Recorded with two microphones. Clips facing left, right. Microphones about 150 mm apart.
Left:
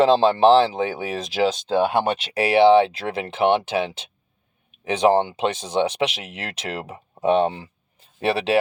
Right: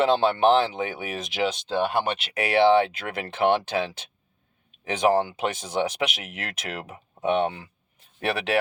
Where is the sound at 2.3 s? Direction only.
25° left (ahead or behind).